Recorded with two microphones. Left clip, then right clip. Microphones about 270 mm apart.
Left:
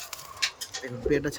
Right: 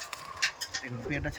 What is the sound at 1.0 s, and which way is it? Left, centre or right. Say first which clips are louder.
Speech: left 10 dB; centre.